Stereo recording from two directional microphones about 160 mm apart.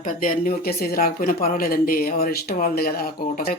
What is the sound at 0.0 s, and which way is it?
Speech, 60° left (ahead or behind).